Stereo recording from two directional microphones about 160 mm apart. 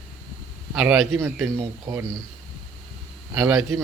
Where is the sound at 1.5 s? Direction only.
15° right (ahead or behind).